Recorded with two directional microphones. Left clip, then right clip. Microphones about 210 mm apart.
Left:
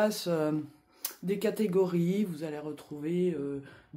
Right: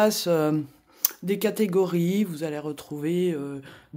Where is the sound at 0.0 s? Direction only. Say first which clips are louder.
Right 7 dB; 45° right (ahead or behind).